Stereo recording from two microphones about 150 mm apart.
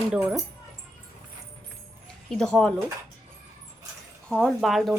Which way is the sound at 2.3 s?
5° left (ahead or behind).